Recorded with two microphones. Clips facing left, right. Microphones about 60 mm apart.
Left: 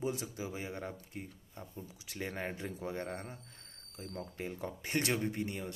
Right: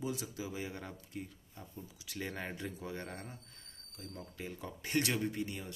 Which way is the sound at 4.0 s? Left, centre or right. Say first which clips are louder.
Left 4 dB; left.